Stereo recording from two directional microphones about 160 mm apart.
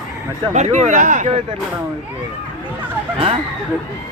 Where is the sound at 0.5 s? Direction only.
45° right (ahead or behind).